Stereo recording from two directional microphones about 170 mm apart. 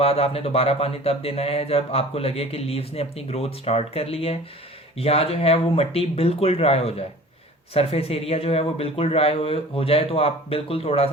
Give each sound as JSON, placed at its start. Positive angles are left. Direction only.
{"t": 0.0, "sound": "speech", "side_deg": 35}